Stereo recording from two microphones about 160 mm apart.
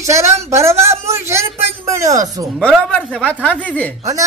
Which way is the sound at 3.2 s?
10° left (ahead or behind).